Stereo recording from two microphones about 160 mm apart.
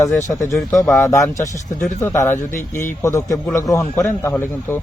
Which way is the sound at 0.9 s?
20° left (ahead or behind).